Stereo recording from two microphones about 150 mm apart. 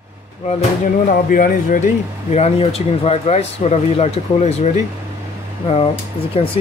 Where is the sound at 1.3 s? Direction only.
65° left (ahead or behind).